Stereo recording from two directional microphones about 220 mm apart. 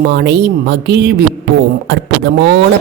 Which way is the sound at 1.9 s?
50° right (ahead or behind).